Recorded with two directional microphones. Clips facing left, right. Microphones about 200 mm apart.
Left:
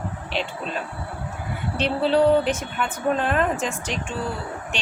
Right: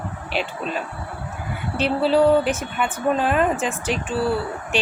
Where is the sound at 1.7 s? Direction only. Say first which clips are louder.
Right 2 dB; 5° right (ahead or behind).